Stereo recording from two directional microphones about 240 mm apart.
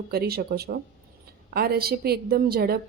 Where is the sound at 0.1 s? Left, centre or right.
Right.